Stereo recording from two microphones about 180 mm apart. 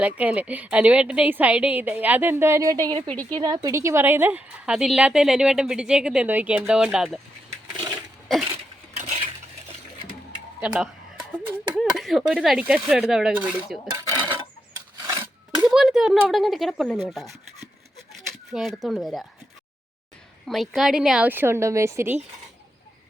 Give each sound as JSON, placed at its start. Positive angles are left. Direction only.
{"t": 0.0, "sound": "a woman's voice", "side_deg": -5}
{"t": 9.0, "sound": "a sound", "side_deg": -30}
{"t": 10.6, "sound": "a woman's voice", "side_deg": -5}
{"t": 11.9, "sound": "a woman's voice", "side_deg": 0}
{"t": 13.9, "sound": "dishes", "side_deg": -20}
{"t": 14.9, "sound": "a sound", "side_deg": -20}
{"t": 15.6, "sound": "a woman's voice", "side_deg": 0}
{"t": 20.5, "sound": "a woman's voice", "side_deg": 0}